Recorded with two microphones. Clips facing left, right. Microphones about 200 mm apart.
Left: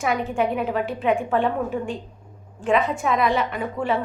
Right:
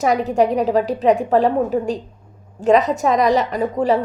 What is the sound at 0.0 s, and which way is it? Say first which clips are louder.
A woman's voice: right 6 dB; 40° right (ahead or behind).